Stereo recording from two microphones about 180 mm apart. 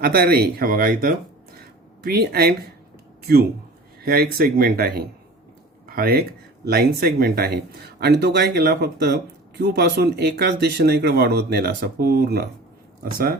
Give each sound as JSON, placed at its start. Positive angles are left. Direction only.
{"t": 0.0, "sound": "speech", "side_deg": -55}
{"t": 4.0, "sound": "speech", "side_deg": -60}